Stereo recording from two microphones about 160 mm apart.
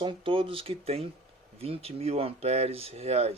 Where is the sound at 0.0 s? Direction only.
35° right (ahead or behind).